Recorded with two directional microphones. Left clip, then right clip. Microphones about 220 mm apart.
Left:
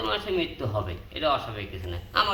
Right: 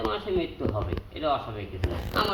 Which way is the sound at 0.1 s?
10° left (ahead or behind).